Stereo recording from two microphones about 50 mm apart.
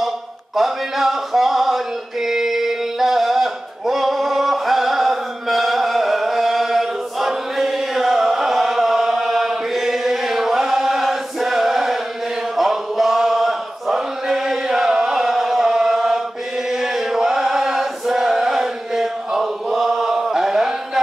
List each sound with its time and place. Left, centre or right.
0.6 s speech: centre
2.2 s a sound: centre
12.5 s chant: centre